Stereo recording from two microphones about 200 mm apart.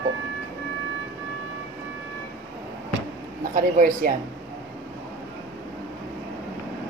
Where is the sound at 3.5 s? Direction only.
40° right (ahead or behind).